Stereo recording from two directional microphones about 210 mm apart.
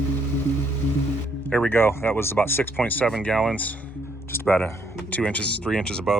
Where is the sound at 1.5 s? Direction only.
10° left (ahead or behind).